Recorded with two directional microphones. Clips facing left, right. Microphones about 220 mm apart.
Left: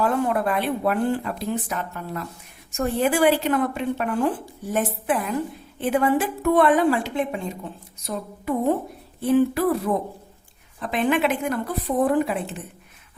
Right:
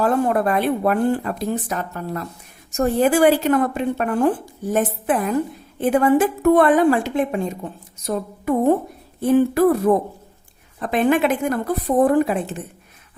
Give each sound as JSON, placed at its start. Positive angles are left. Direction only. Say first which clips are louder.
{"t": 0.0, "sound": "speech", "louder": "right 4 dB", "side_deg": -40}
{"t": 9.2, "sound": "speech", "louder": "right 4 dB", "side_deg": -45}